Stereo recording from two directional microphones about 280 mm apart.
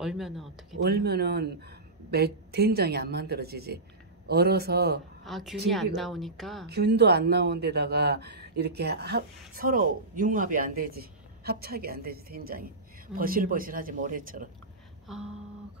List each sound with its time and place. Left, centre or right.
0.0 s a woman's voice: centre
0.8 s speech: right
5.2 s a woman's voice: centre
6.7 s speech: right
15.0 s a woman's voice: centre